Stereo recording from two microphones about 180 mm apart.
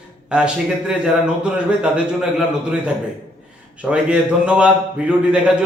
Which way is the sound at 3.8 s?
5° right (ahead or behind).